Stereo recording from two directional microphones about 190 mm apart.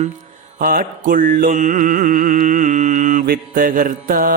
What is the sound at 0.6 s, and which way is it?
Mantra, 45° right (ahead or behind).